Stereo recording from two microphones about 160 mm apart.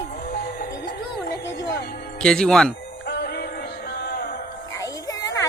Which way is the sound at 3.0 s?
90° left.